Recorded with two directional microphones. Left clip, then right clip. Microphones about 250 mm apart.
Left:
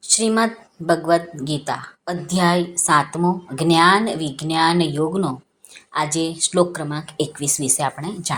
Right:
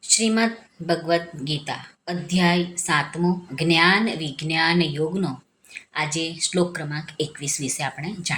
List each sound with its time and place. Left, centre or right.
0.1 s speech: centre